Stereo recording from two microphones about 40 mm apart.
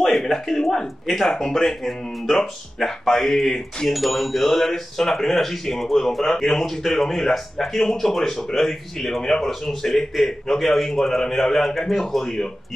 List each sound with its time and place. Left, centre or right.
0.0 s speech: centre